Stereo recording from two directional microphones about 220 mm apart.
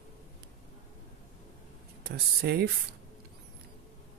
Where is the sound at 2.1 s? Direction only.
45° right (ahead or behind).